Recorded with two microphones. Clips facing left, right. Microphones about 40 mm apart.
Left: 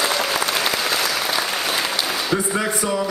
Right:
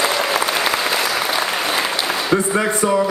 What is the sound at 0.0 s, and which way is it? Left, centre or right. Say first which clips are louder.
Applause: right 3 dB; centre.